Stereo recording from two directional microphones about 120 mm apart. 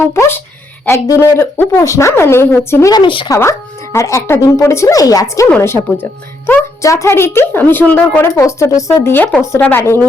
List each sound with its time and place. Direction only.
0.1 s a woman's voice: 20° left (ahead or behind)
2.9 s speech: 45° left (ahead or behind)
3.2 s a woman's voice: 25° left (ahead or behind)
5.5 s a woman's voice: 15° left (ahead or behind)